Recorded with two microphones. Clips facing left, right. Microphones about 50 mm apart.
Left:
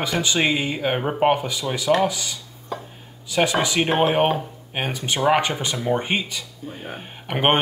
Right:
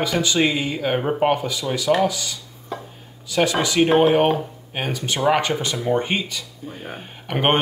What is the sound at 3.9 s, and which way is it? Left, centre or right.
Speech, centre.